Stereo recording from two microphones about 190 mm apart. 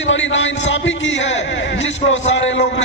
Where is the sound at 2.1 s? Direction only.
85° left.